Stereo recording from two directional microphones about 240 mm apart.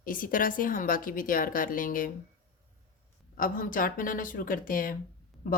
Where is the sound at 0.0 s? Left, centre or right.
Left.